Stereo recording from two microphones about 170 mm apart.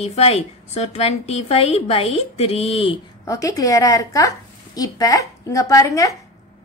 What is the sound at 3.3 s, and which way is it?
A woman's voice, 20° left (ahead or behind).